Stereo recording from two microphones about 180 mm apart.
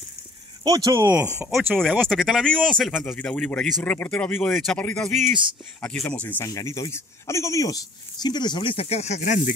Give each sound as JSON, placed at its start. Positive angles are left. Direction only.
{"t": 0.7, "sound": "speech", "side_deg": -20}
{"t": 1.8, "sound": "speech", "side_deg": 0}